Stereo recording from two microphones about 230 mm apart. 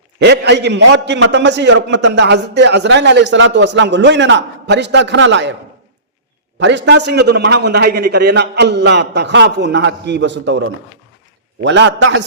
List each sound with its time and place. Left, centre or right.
0.2 s a man's voice: right
6.6 s a man's voice: right
11.6 s a man's voice: right